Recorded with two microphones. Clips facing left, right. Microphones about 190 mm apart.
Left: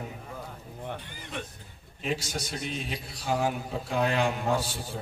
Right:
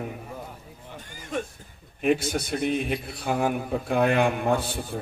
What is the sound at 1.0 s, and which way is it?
Music, 45° right (ahead or behind).